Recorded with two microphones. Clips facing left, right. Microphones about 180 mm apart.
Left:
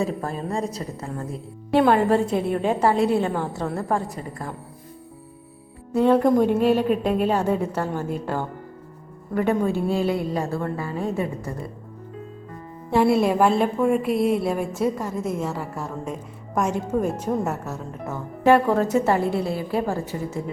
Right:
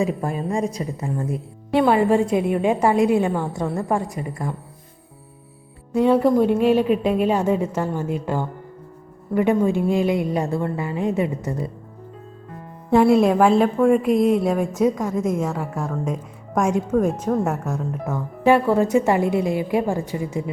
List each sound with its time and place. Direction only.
0.0 s speech: 15° right (ahead or behind)
6.0 s speech: 10° right (ahead or behind)
12.9 s a woman's voice: 5° left (ahead or behind); by 20.4 s 15° right (ahead or behind)